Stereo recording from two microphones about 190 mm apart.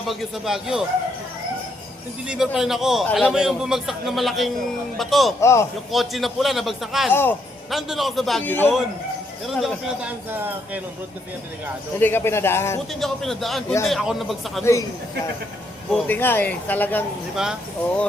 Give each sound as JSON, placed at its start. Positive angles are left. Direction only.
{"t": 0.1, "sound": "a man's voice", "side_deg": 0}
{"t": 2.2, "sound": "a man's voice", "side_deg": -5}
{"t": 5.4, "sound": "speech", "side_deg": 15}
{"t": 5.9, "sound": "a man's voice", "side_deg": 0}
{"t": 7.1, "sound": "speech", "side_deg": 10}
{"t": 7.7, "sound": "a man's voice", "side_deg": 0}
{"t": 10.2, "sound": "speech", "side_deg": -10}
{"t": 11.9, "sound": "speech", "side_deg": 10}
{"t": 12.9, "sound": "a man's voice", "side_deg": 0}
{"t": 14.6, "sound": "speech", "side_deg": 15}
{"t": 15.9, "sound": "speech", "side_deg": 10}
{"t": 17.3, "sound": "a man's voice", "side_deg": -5}